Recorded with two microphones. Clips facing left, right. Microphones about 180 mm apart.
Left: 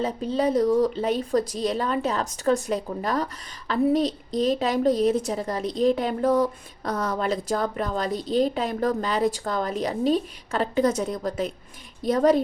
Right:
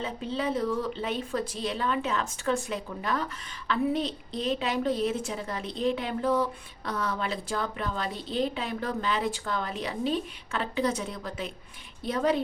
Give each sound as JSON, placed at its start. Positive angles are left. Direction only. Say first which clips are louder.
{"t": 0.0, "sound": "a woman's voice", "louder": "left 7 dB", "side_deg": 40}